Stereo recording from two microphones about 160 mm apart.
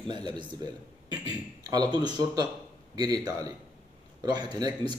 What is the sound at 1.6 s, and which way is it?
A man's voice, 25° right (ahead or behind).